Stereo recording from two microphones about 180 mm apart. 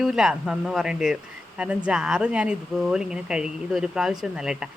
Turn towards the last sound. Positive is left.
turn(degrees=-5)  # may be behind; listen again after turning